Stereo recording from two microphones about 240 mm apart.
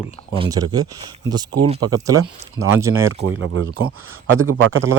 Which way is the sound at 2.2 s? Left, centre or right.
Right.